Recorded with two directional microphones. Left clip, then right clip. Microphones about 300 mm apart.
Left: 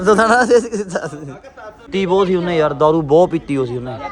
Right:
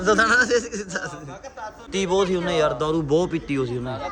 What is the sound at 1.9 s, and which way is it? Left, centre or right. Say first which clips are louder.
Speech: left 6 dB; left.